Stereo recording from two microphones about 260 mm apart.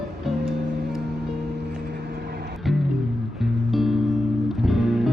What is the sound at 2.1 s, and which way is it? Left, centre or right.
Music, right.